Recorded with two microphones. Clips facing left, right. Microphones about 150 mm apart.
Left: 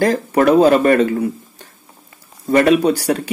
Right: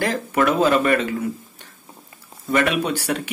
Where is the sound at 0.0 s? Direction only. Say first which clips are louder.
Left 6 dB; 40° left (ahead or behind).